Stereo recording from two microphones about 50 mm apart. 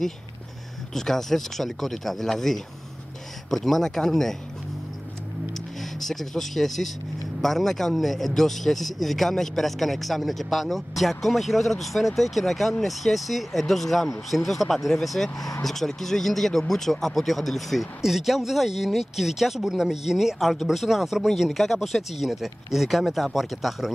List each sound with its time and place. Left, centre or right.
0.9 s speech: centre
5.5 s speech: centre